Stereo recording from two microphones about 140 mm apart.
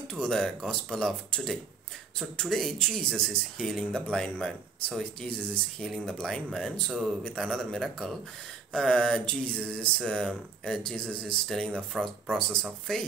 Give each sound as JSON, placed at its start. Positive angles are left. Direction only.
{"t": 0.1, "sound": "speech", "side_deg": 5}